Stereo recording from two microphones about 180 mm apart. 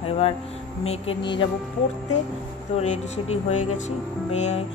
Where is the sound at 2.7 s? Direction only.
40° left (ahead or behind).